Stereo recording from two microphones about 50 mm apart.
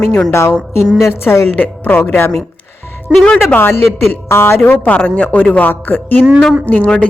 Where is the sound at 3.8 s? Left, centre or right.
Left.